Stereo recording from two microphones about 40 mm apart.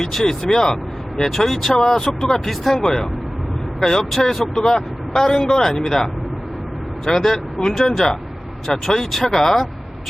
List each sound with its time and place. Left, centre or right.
0.0 s speech: centre
1.7 s speech: centre